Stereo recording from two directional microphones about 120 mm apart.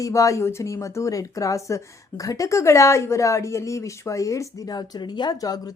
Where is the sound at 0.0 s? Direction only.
25° left (ahead or behind).